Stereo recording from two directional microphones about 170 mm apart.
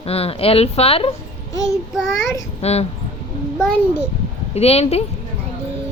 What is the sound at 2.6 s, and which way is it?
Speech, 40° left (ahead or behind).